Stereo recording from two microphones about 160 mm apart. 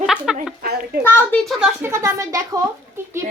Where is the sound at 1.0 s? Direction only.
10° left (ahead or behind).